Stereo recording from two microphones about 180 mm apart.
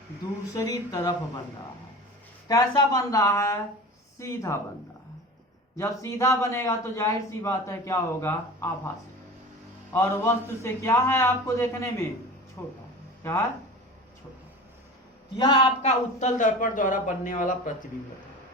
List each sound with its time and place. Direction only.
0.5 s speech: 20° left (ahead or behind)
2.5 s a man's voice: 20° left (ahead or behind)
5.7 s a man's voice: 15° left (ahead or behind)
9.9 s a man's voice: 15° left (ahead or behind)
15.4 s speech: 25° left (ahead or behind)
15.8 s a man's voice: 40° left (ahead or behind)